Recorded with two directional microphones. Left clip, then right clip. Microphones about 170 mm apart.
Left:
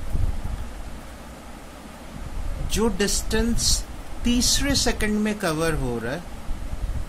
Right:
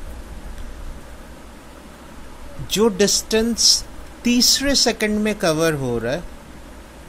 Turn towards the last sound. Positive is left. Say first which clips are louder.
# right 5 dB
turn(degrees=-30)  # may be behind; listen again after turning